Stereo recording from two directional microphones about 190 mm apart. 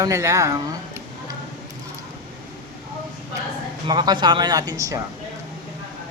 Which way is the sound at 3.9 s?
25° right (ahead or behind).